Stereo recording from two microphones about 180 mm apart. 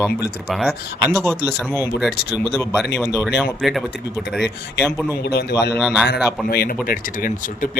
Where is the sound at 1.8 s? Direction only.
5° right (ahead or behind).